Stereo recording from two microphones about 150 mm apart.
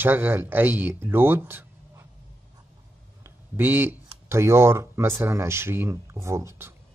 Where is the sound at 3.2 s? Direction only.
15° right (ahead or behind).